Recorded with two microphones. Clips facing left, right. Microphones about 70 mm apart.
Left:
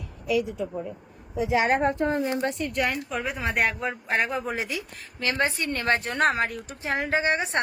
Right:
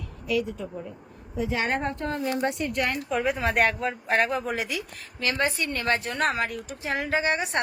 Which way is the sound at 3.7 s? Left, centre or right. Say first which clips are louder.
Right 1 dB; centre.